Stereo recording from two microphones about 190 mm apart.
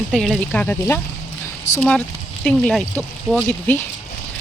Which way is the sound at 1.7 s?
40° left (ahead or behind).